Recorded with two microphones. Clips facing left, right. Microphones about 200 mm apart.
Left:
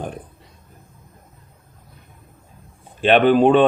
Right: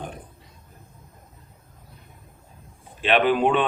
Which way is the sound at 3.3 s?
35° left (ahead or behind).